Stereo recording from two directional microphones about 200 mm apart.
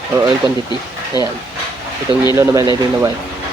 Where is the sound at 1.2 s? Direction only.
20° left (ahead or behind).